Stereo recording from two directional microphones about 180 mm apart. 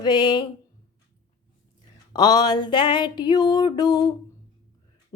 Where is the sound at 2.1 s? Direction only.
20° left (ahead or behind).